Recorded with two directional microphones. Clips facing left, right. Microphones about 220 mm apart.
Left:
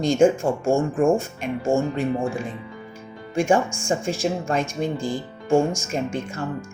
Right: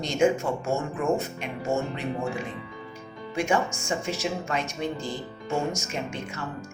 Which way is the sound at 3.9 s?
50° left (ahead or behind).